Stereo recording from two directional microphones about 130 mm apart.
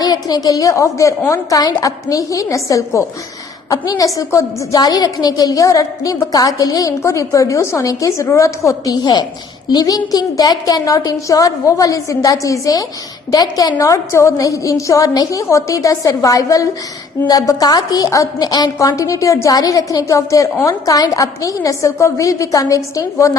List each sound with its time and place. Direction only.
0.0 s a woman's voice: 30° left (ahead or behind)